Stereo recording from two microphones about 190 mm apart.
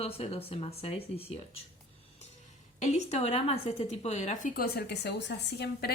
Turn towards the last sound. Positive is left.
turn(degrees=60)  # may be behind; listen again after turning